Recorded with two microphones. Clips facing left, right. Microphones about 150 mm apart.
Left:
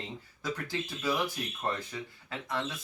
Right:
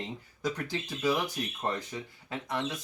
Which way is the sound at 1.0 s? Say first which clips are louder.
Right 3 dB; 15° right (ahead or behind).